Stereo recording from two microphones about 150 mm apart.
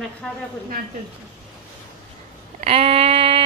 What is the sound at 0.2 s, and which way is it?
Speech, 5° left (ahead or behind).